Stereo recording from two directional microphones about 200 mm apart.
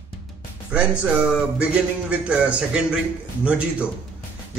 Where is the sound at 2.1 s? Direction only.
5° right (ahead or behind).